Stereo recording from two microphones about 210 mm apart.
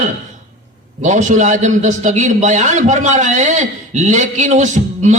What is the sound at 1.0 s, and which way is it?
A man's voice, 35° right (ahead or behind).